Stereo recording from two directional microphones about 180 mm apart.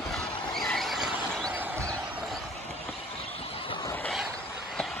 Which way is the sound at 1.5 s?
10° right (ahead or behind).